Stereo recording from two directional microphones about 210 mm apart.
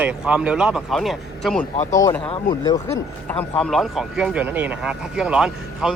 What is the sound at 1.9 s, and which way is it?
Speech, 15° left (ahead or behind).